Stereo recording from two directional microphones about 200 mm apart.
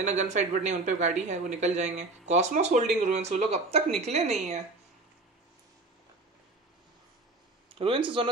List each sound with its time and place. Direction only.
0.0 s speech: 35° right (ahead or behind)
7.7 s speech: 25° right (ahead or behind)